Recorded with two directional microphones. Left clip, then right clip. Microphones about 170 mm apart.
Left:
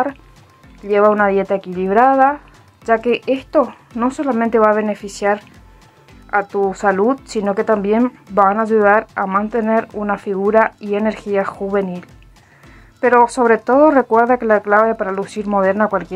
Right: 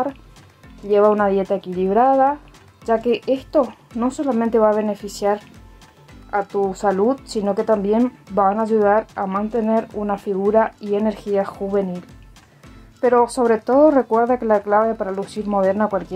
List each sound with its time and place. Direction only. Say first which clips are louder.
0.8 s speech: left 2 dB; 10° left (ahead or behind)
6.6 s speech: left 2 dB; 20° left (ahead or behind)
13.0 s speech: left 4 dB; 20° left (ahead or behind)